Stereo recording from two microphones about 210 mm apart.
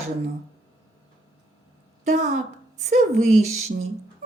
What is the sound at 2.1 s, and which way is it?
Speech, 35° right (ahead or behind).